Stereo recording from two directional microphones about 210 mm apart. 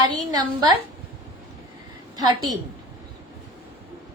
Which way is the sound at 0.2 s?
15° right (ahead or behind).